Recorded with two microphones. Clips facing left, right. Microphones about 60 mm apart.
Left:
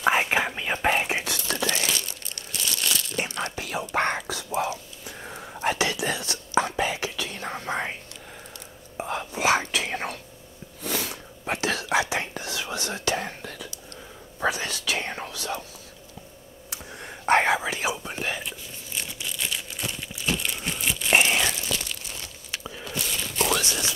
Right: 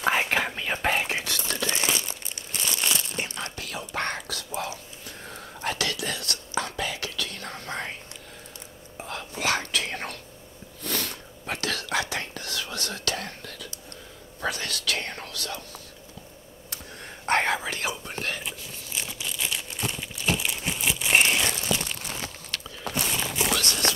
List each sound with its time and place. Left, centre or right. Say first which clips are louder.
0.0 s whispering: left 2 dB; centre
1.7 s crumpling: even; right
3.2 s whispering: left 4 dB; left
8.9 s whispering: left 5 dB; left
10.8 s sneeze: left 2 dB; centre
11.4 s whispering: left 4 dB; centre
16.7 s whispering: left 2 dB; centre
18.4 s crumpling: even; centre
21.1 s crumpling: left 1 dB; centre
23.1 s a sound: left 4 dB; centre
23.5 s a sound: left 1 dB; centre